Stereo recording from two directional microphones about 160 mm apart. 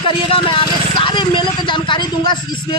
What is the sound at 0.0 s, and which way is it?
A woman's voice, 35° left (ahead or behind).